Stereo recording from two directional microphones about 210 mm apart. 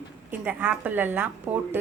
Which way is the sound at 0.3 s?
5° right (ahead or behind).